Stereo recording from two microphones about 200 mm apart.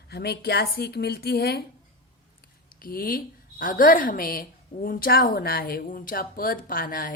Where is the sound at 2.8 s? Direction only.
45° left (ahead or behind).